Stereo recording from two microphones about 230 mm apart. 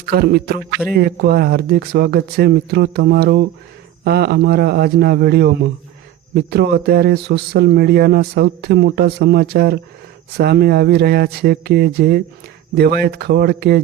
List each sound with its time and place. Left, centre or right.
0.0 s speech: right